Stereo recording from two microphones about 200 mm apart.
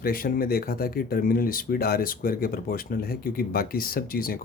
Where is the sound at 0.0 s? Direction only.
45° left (ahead or behind).